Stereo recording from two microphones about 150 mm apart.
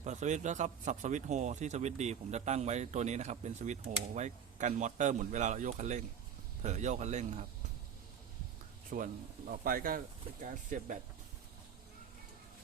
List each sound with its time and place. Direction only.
0.0 s speech: 50° right (ahead or behind)
8.9 s speech: 65° right (ahead or behind)
10.4 s speech: 60° right (ahead or behind)